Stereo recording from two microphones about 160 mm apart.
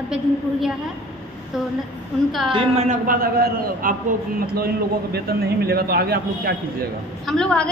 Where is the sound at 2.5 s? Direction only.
40° right (ahead or behind).